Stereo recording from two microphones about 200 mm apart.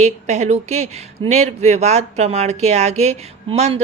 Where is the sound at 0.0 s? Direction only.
35° right (ahead or behind).